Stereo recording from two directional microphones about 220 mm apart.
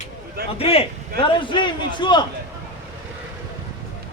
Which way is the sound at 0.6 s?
25° left (ahead or behind).